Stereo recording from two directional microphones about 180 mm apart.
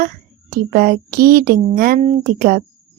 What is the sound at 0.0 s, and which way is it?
A woman's voice, 55° right (ahead or behind).